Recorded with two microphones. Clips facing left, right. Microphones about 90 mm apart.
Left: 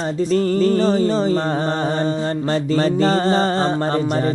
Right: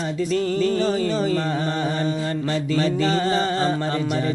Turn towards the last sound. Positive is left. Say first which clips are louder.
# left 3 dB
turn(degrees=35)  # may be behind; listen again after turning